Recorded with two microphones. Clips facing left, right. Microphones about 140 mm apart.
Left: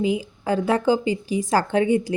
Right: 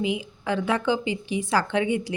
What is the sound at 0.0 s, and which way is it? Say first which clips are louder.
A woman's voice: left 4 dB; 40° left (ahead or behind).